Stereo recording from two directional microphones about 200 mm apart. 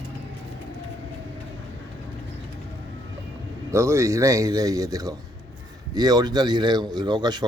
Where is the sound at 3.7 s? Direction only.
15° right (ahead or behind).